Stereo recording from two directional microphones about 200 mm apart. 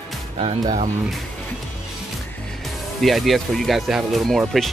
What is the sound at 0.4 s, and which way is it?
Speech, 30° right (ahead or behind).